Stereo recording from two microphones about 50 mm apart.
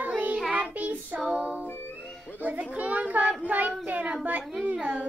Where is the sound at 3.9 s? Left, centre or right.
Right.